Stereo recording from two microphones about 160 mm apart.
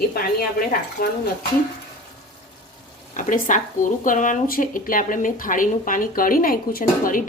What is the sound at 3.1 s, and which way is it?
Speech, 55° left (ahead or behind).